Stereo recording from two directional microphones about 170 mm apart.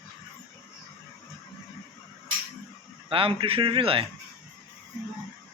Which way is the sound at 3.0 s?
30° right (ahead or behind).